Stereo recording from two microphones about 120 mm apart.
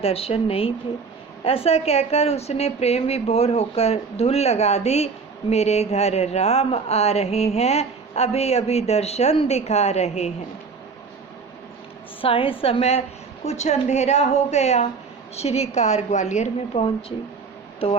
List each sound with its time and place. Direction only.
0.0 s a woman's voice: 55° left (ahead or behind)
12.2 s a woman's voice: 50° left (ahead or behind)
13.4 s a woman's voice: 70° left (ahead or behind)
16.7 s a woman's voice: 50° left (ahead or behind)